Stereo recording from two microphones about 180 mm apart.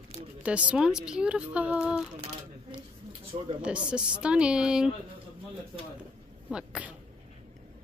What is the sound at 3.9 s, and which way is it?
Speech, 5° right (ahead or behind).